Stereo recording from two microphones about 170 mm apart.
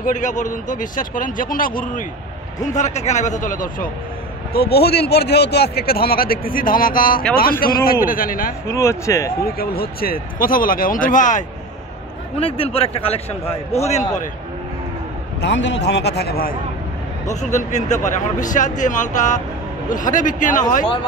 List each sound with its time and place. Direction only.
0.0 s speech: 50° left (ahead or behind)
2.6 s speech: 45° left (ahead or behind)
4.6 s speech: 70° left (ahead or behind)
8.6 s speech: 15° left (ahead or behind)
9.4 s speech: 60° left (ahead or behind)
12.4 s a man's voice: 35° left (ahead or behind)
15.4 s speech: 90° left; by 16.5 s 65° left (ahead or behind)
17.3 s speech: 45° left (ahead or behind)